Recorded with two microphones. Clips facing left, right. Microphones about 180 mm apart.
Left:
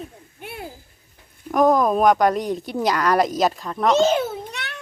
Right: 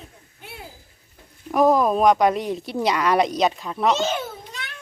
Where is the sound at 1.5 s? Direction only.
Centre (ahead or behind).